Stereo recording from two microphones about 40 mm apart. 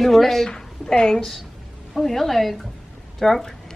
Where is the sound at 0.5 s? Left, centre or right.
Centre.